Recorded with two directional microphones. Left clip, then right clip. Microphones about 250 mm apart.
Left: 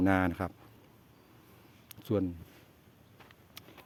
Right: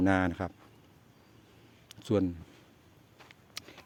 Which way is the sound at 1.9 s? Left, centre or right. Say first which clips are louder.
Right 3 dB; centre.